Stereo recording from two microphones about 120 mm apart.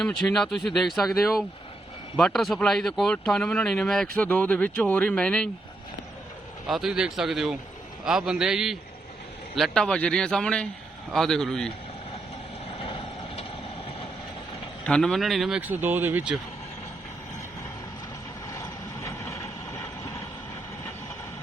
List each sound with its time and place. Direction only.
0.0 s speech: 5° left (ahead or behind)
6.7 s speech: centre (ahead or behind)
12.8 s vehicle: 50° left (ahead or behind)
14.8 s speech: 5° left (ahead or behind)
15.7 s speech: 15° right (ahead or behind)
18.5 s vehicle: 25° left (ahead or behind)